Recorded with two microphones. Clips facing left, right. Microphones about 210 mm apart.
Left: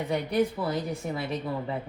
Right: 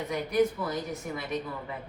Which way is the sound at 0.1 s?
30° left (ahead or behind).